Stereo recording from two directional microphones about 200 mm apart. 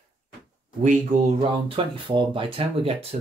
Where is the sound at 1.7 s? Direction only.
25° right (ahead or behind).